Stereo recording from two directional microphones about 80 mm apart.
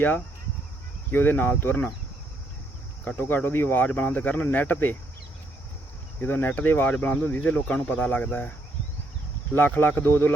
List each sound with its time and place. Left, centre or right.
1.1 s speech: left
3.2 s speech: left
6.2 s speech: left
9.6 s speech: left